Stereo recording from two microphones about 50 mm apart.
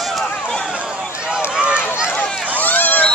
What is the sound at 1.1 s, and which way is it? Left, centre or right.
Run, centre.